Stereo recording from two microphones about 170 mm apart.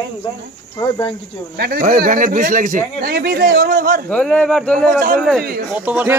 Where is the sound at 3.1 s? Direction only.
65° right (ahead or behind).